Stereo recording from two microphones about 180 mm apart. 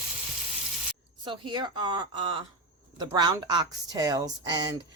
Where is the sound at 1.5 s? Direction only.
25° right (ahead or behind).